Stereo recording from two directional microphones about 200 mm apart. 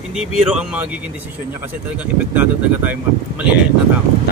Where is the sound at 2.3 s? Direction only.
10° right (ahead or behind).